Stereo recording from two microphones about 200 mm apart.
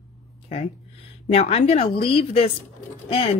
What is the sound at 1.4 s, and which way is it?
Speech, 30° left (ahead or behind).